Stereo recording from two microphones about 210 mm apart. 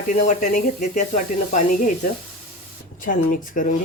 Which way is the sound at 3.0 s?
40° left (ahead or behind).